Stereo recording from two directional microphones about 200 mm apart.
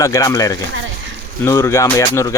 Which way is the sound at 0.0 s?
15° left (ahead or behind).